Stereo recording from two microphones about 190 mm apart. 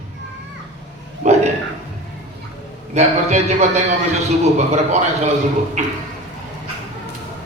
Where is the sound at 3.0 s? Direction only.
35° right (ahead or behind).